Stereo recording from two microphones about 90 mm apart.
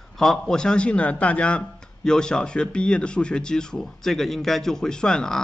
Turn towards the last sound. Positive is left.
turn(degrees=5)  # may be behind; listen again after turning